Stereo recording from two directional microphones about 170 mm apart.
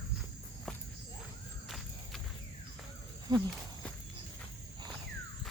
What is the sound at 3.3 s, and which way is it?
Speech, 20° right (ahead or behind).